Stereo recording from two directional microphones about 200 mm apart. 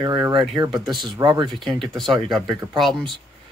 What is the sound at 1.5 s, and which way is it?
Speech, centre (ahead or behind).